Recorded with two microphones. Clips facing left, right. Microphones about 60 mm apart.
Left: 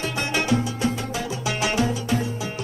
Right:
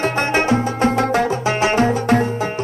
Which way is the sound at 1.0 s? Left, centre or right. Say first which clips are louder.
Right 12 dB; right.